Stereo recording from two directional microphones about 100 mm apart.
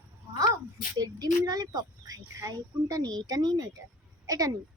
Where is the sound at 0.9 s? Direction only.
40° right (ahead or behind).